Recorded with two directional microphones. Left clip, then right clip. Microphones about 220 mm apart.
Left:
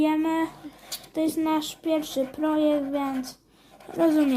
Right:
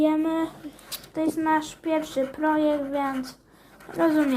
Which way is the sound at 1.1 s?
50° left (ahead or behind).